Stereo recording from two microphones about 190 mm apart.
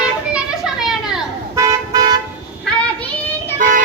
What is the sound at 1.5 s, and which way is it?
Toot, 20° right (ahead or behind).